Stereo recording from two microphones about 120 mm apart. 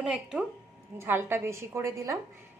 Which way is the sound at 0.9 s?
20° right (ahead or behind).